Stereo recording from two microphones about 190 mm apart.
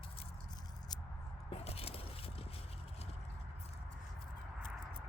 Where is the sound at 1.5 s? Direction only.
30° left (ahead or behind).